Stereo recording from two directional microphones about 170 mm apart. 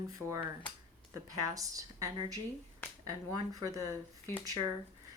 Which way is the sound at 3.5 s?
20° right (ahead or behind).